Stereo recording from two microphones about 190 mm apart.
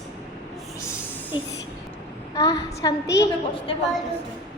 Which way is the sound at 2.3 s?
20° left (ahead or behind).